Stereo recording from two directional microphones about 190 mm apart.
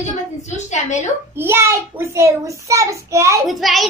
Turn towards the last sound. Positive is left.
turn(degrees=0)  # may be behind; listen again after turning